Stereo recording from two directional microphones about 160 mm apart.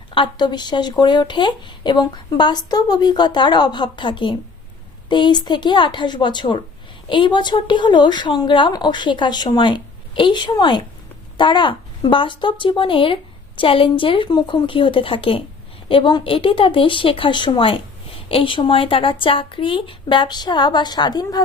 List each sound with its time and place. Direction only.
0.1 s speech: 30° left (ahead or behind)